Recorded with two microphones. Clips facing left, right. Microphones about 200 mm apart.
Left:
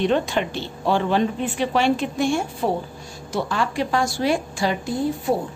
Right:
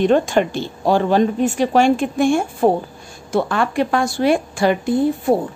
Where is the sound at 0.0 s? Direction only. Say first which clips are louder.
Right 6 dB; 45° right (ahead or behind).